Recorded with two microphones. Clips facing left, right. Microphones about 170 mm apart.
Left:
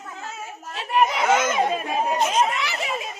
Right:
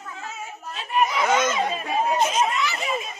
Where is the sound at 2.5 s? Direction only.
70° left (ahead or behind).